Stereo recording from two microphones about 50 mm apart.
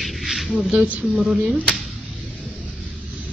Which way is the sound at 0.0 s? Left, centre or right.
Centre.